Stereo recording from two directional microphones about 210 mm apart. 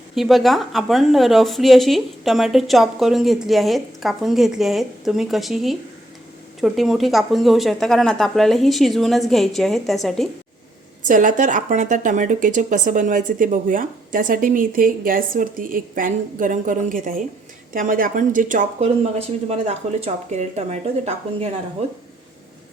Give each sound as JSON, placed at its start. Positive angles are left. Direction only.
{"t": 0.2, "sound": "a woman's voice", "side_deg": 0}
{"t": 11.0, "sound": "speech", "side_deg": -40}